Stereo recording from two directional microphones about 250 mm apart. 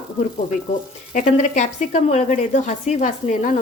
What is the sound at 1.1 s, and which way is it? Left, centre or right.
A woman's voice, left.